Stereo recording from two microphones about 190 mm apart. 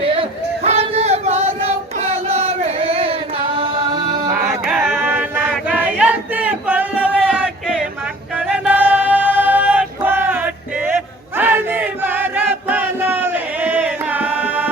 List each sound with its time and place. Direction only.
0.1 s a sound: 30° right (ahead or behind)
4.6 s choir: 5° right (ahead or behind)
8.4 s a capella: 5° right (ahead or behind)
11.3 s chant: 10° right (ahead or behind)